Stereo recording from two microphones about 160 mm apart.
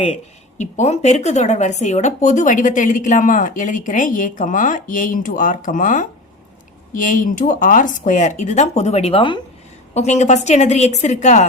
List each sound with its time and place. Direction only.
0.6 s speech: 45° left (ahead or behind)
9.9 s speech: 45° left (ahead or behind)